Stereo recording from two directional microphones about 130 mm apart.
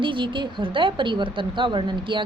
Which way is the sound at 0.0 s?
40° right (ahead or behind).